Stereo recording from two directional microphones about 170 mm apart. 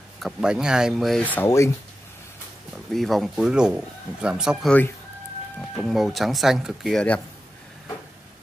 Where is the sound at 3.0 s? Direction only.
Centre (ahead or behind).